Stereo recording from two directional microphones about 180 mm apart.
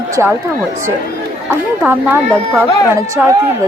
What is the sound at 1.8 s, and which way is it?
A woman's voice, 10° right (ahead or behind).